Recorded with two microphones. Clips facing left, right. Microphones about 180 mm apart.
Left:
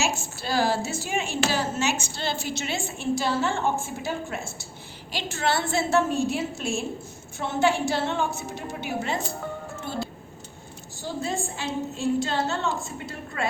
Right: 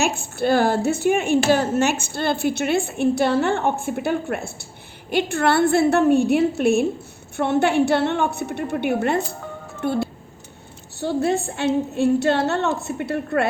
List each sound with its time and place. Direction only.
0.0 s speech: 60° right (ahead or behind)
11.0 s speech: 65° right (ahead or behind)